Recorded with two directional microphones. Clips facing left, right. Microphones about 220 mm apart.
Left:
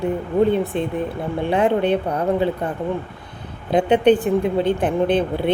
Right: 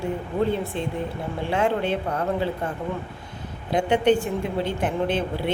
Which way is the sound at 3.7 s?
20° left (ahead or behind).